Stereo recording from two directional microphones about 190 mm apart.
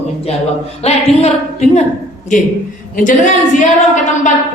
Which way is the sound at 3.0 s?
40° left (ahead or behind).